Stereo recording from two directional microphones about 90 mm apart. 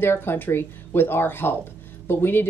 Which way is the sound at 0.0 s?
25° left (ahead or behind).